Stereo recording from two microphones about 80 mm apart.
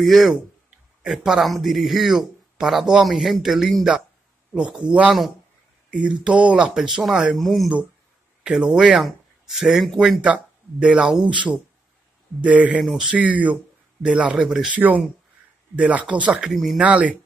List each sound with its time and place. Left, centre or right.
0.0 s a man's voice: centre
6.2 s speech: centre
10.2 s speech: centre
12.4 s speech: centre
13.1 s speech: centre
14.7 s speech: centre
16.4 s speech: centre
16.8 s speech: centre